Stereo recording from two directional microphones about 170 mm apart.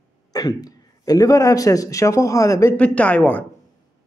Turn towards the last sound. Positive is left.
turn(degrees=10)  # may be behind; listen again after turning